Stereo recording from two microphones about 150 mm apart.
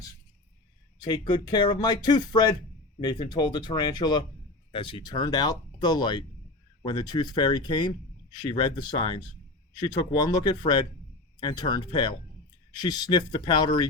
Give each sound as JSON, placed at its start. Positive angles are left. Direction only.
{"t": 1.0, "sound": "speech", "side_deg": 30}